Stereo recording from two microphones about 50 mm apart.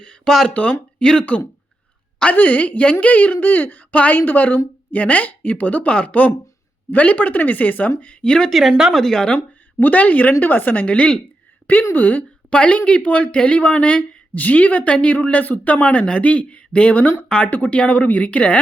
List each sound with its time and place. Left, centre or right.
0.0 s a sound: centre
0.5 s speech: left
2.3 s a woman's voice: left
8.2 s speech: centre
8.4 s speech: centre
8.9 s speech: centre
9.8 s a woman's voice: left
11.9 s a woman's voice: left
12.5 s a woman's voice: left
17.5 s speech: left